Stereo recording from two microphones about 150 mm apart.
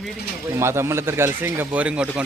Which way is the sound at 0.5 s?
15° right (ahead or behind).